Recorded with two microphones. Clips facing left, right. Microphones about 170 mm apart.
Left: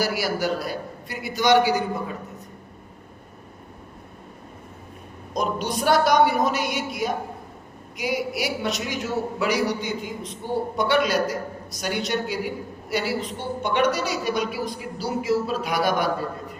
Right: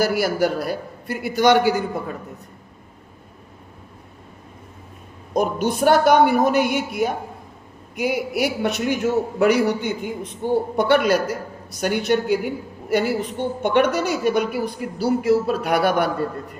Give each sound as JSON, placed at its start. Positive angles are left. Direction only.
{"t": 0.0, "sound": "a woman's voice", "side_deg": -55}
{"t": 5.3, "sound": "a woman's voice", "side_deg": -55}